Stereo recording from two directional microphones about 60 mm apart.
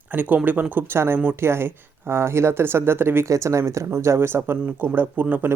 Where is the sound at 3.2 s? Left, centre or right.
Right.